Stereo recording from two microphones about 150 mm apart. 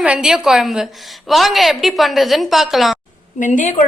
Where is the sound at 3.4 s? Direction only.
60° left (ahead or behind).